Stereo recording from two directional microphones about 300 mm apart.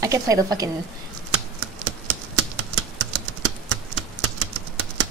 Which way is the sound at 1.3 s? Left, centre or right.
Right.